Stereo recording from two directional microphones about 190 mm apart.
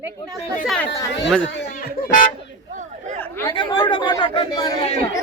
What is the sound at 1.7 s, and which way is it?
Music, 45° left (ahead or behind).